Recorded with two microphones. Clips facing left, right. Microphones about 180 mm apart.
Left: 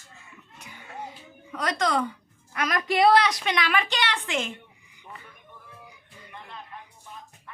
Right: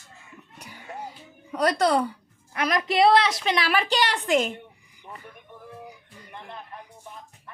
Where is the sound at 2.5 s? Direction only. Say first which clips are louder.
Right 2 dB; 25° right (ahead or behind).